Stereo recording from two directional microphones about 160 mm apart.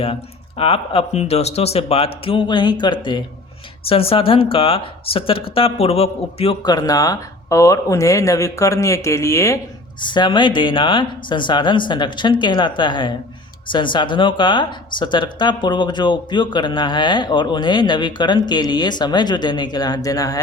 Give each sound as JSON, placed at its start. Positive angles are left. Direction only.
{"t": 0.0, "sound": "speech", "side_deg": 35}
{"t": 10.0, "sound": "speech", "side_deg": 30}